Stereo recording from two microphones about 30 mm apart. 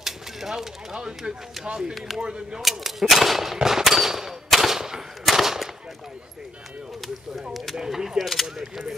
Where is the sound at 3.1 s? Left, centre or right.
Centre.